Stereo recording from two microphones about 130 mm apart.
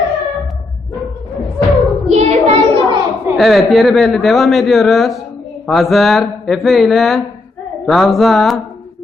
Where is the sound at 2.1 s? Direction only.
55° right (ahead or behind).